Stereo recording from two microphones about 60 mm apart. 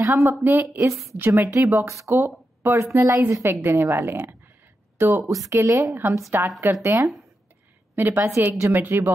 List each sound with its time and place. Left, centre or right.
0.0 s speech: right
0.4 s a woman's voice: right
1.4 s speech: right
2.1 s a sound: right
2.7 s a woman's voice: right
3.6 s a woman's voice: right
5.4 s a woman's voice: right
6.3 s a woman's voice: right
6.7 s speech: right
7.9 s a woman's voice: right